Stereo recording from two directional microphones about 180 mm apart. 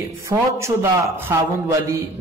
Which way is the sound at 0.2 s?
15° right (ahead or behind).